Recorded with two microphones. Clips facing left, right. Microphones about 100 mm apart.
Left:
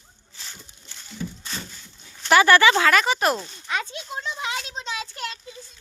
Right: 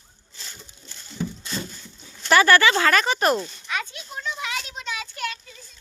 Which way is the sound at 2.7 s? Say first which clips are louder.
Left 1 dB; 5° left (ahead or behind).